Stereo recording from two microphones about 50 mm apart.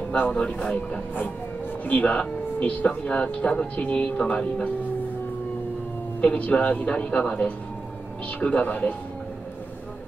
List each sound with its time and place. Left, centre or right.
0.3 s speech: left
6.2 s speech: left